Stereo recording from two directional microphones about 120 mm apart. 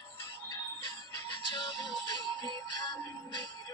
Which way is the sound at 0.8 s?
40° left (ahead or behind).